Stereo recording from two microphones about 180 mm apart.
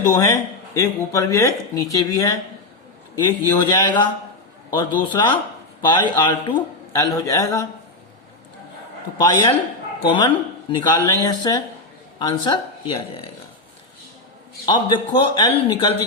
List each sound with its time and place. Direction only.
0.2 s a man's voice: 15° left (ahead or behind)
9.1 s a man's voice: 20° left (ahead or behind)
14.7 s a man's voice: 25° left (ahead or behind)